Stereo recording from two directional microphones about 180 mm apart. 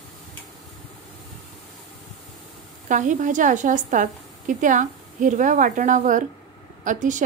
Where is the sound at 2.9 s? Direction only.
45° right (ahead or behind).